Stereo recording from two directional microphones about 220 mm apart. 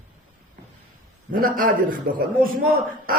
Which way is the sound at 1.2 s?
40° right (ahead or behind).